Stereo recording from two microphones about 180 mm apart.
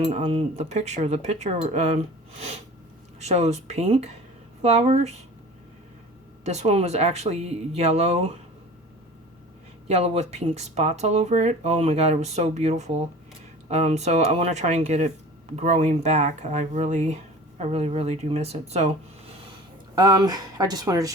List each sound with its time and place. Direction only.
0.1 s speech: 35° right (ahead or behind)
3.2 s speech: 35° right (ahead or behind)
6.4 s speech: 35° right (ahead or behind)
9.8 s speech: 35° right (ahead or behind)
20.0 s speech: 20° right (ahead or behind)